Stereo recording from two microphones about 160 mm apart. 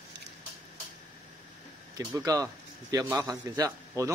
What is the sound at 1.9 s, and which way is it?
A man's voice, 20° right (ahead or behind).